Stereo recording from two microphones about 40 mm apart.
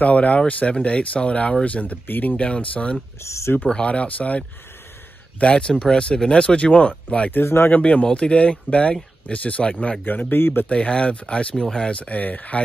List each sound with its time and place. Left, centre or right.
0.0 s speech: left
0.7 s speech: left
2.0 s speech: left
2.3 s speech: left
5.4 s speech: left
7.2 s speech: left
7.8 s speech: left
10.0 s speech: left
10.7 s speech: left
11.9 s speech: left